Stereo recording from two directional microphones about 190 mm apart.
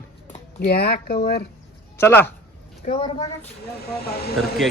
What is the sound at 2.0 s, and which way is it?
Speech, 10° left (ahead or behind).